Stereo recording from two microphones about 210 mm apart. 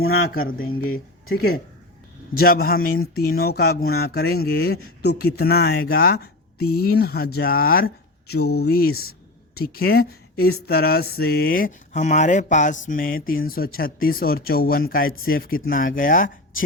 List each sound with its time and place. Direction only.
0.3 s speech: 45° left (ahead or behind)